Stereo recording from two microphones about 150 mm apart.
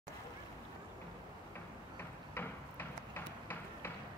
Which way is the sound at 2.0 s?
15° left (ahead or behind).